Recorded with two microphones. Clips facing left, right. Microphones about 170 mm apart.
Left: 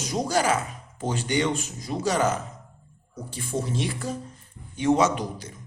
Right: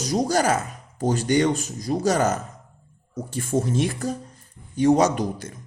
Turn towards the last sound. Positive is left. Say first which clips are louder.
# right 3 dB
turn(degrees=-40)  # may be behind; listen again after turning